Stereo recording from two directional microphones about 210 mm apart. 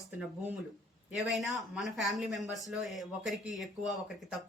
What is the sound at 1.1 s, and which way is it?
A woman's voice, centre (ahead or behind).